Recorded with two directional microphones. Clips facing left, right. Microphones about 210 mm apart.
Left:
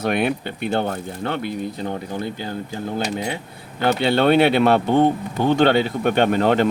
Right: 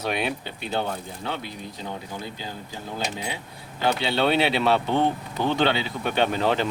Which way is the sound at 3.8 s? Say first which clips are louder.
Left 5 dB; 55° left (ahead or behind).